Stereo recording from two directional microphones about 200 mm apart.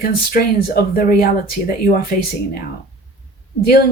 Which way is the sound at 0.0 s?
50° left (ahead or behind).